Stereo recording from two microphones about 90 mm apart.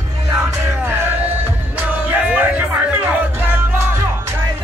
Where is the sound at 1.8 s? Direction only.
15° right (ahead or behind).